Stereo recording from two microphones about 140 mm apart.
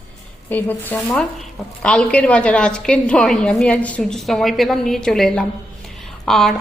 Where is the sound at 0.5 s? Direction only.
15° left (ahead or behind).